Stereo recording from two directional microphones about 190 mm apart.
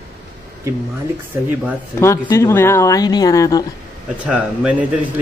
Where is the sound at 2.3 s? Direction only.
15° left (ahead or behind).